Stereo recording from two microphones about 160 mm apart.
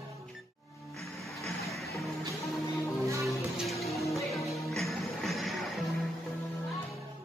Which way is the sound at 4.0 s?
20° left (ahead or behind).